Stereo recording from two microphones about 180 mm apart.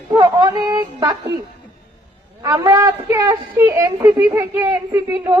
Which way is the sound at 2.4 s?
20° right (ahead or behind).